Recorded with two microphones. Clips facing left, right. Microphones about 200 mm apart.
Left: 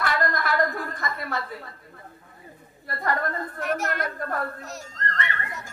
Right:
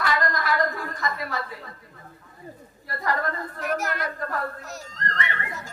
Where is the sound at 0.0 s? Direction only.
55° left (ahead or behind).